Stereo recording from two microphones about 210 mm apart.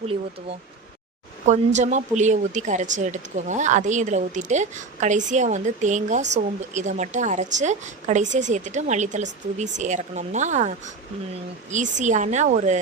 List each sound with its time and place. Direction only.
1.5 s a woman's voice: 35° right (ahead or behind)